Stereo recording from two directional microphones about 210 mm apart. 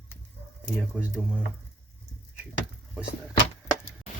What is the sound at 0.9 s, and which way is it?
Speech, 5° right (ahead or behind).